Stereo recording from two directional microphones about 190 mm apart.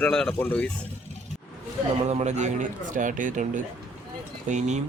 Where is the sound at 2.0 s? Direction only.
35° right (ahead or behind).